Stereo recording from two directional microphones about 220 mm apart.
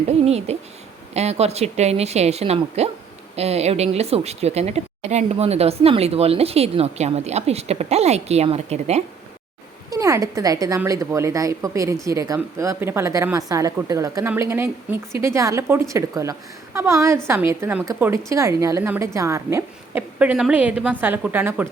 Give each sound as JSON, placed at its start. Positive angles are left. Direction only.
{"t": 0.3, "sound": "a woman's voice", "side_deg": -30}
{"t": 9.9, "sound": "a woman's voice", "side_deg": -15}